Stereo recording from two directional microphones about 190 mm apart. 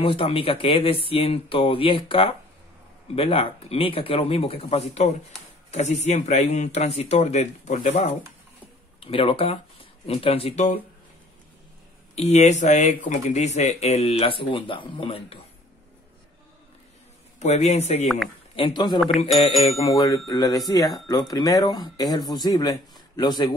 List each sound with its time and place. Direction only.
0.0 s speech: 30° left (ahead or behind)
12.2 s speech: 35° left (ahead or behind)
17.4 s speech: 35° left (ahead or behind)
18.9 s speech: centre (ahead or behind)
19.8 s speech: 20° left (ahead or behind)